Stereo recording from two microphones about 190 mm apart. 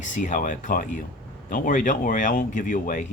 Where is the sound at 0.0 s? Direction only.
40° left (ahead or behind).